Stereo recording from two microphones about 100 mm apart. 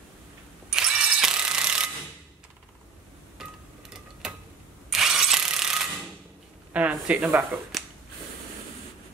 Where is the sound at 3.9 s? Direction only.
5° right (ahead or behind).